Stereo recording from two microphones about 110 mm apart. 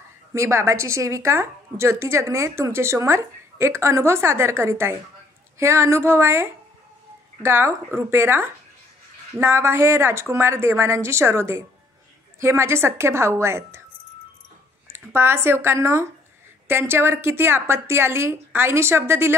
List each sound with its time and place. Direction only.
0.3 s a woman's voice: 25° right (ahead or behind)
14.9 s a woman's voice: 20° right (ahead or behind)